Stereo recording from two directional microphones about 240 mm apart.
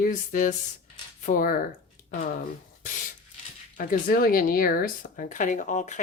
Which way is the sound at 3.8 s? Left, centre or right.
Left.